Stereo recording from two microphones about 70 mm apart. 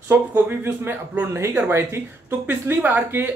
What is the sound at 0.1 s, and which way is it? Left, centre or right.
Speech, right.